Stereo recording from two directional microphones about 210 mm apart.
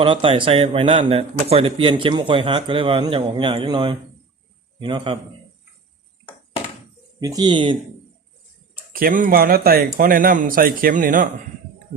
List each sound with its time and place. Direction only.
0.0 s a man's voice: 25° right (ahead or behind)
7.2 s a man's voice: 20° right (ahead or behind)
8.9 s speech: 45° right (ahead or behind)